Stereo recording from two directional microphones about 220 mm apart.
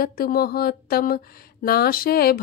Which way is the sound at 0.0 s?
45° left (ahead or behind).